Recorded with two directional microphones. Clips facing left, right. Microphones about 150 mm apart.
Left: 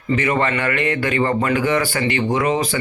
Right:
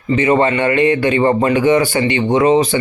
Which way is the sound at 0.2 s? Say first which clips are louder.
Right 9 dB; 25° right (ahead or behind).